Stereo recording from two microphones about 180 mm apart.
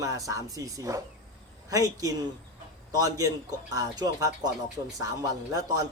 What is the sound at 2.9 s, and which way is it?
A man's voice, 20° right (ahead or behind).